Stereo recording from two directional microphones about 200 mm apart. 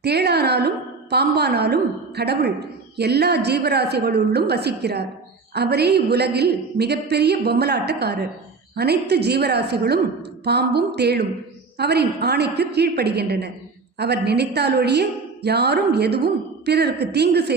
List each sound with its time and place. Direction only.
0.0 s a woman's voice: 55° right (ahead or behind)